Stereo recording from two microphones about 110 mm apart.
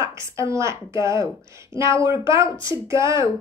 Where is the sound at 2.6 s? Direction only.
45° left (ahead or behind).